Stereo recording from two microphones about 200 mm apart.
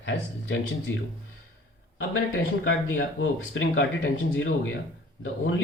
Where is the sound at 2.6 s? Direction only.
75° left (ahead or behind).